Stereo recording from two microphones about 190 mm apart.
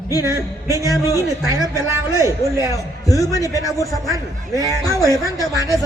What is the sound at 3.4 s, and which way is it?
Speech, 15° right (ahead or behind).